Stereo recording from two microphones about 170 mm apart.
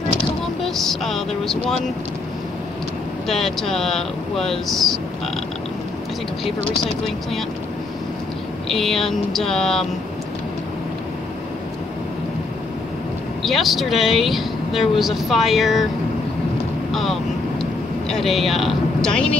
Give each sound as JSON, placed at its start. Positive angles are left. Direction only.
{"t": 0.7, "sound": "speech", "side_deg": 0}
{"t": 3.3, "sound": "speech", "side_deg": 0}
{"t": 8.6, "sound": "speech", "side_deg": 0}
{"t": 13.4, "sound": "speech", "side_deg": 0}
{"t": 16.9, "sound": "vehicle", "side_deg": 0}